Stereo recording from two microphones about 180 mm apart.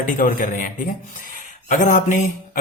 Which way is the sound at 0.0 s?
50° left (ahead or behind).